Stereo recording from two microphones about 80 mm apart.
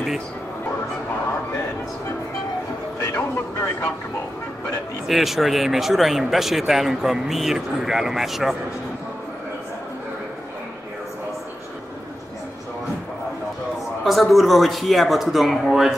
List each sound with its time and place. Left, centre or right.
3.2 s vehicle: left
5.0 s speech: centre
14.0 s speech: centre